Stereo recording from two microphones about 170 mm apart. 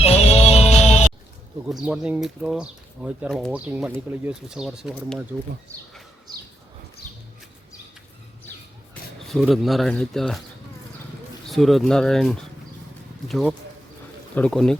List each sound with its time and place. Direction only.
0.0 s music: 40° left (ahead or behind)
1.6 s speech: 5° right (ahead or behind)
9.2 s speech: centre (ahead or behind)
11.4 s speech: centre (ahead or behind)